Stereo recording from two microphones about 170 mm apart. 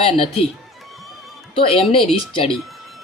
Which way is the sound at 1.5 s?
35° left (ahead or behind).